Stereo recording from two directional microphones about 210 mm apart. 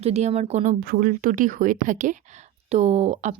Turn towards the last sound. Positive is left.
turn(degrees=-35)  # may be behind; listen again after turning